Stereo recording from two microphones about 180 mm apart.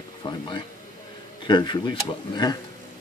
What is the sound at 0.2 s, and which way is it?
Speech, 25° left (ahead or behind).